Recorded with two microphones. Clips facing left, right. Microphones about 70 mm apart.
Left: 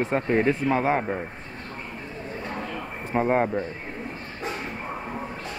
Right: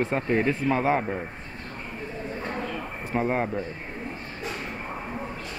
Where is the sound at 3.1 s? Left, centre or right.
Centre.